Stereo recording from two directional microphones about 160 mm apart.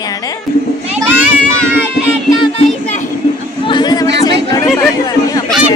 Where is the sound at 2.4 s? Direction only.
35° left (ahead or behind).